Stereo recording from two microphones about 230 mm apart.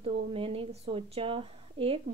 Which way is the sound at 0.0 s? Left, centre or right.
Right.